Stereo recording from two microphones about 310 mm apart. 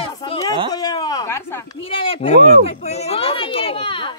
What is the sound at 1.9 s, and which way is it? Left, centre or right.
Speech, centre.